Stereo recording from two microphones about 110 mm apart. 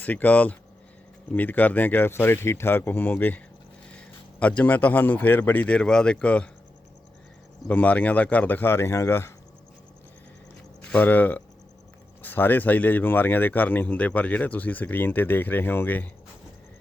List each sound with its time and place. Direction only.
0.0 s speech: 15° left (ahead or behind)
7.7 s speech: 15° left (ahead or behind)
10.9 s speech: 15° left (ahead or behind)